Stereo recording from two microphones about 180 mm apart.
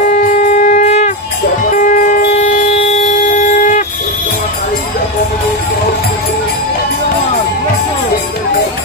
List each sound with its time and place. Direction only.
0.0 s shofar: 45° left (ahead or behind)
1.8 s wind instrument: 45° left (ahead or behind)